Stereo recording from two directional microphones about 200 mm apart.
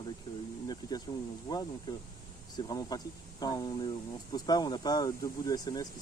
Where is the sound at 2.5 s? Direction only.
20° left (ahead or behind).